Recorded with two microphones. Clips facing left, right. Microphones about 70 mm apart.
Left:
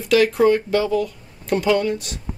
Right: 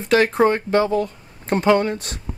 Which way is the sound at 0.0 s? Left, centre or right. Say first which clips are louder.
Even; right.